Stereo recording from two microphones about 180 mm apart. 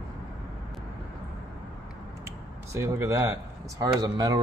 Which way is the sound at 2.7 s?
15° right (ahead or behind).